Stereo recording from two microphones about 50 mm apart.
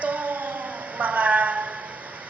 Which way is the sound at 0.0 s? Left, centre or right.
Right.